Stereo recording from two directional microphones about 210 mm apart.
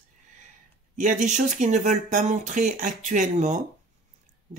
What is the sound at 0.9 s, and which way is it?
Speech, 35° right (ahead or behind).